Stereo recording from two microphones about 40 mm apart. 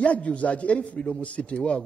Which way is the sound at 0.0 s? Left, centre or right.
Left.